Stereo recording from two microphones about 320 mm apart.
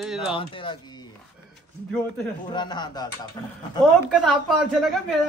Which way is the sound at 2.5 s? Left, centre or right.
Centre.